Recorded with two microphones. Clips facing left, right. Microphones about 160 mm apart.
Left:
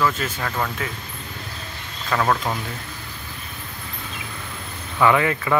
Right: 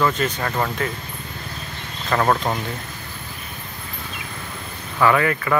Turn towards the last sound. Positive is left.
turn(degrees=15)  # may be behind; listen again after turning